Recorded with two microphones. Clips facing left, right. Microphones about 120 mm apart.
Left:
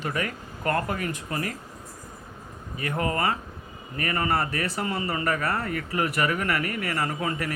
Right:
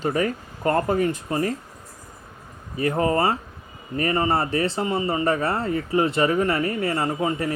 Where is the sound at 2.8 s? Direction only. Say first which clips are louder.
Right 6 dB; 30° right (ahead or behind).